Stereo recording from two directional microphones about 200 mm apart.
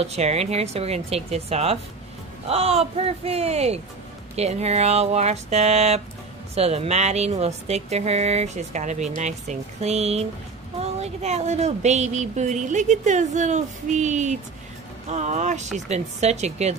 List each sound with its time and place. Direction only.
0.0 s speech: 30° right (ahead or behind)